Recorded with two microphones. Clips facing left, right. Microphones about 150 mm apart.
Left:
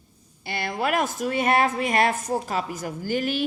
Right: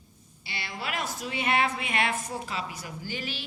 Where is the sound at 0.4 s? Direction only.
50° left (ahead or behind).